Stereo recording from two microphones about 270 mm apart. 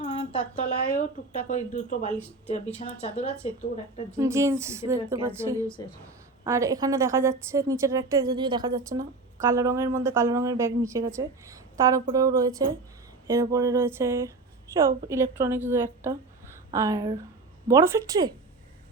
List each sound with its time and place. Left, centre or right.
0.0 s a sound: left
0.9 s speech: left
4.2 s speech: centre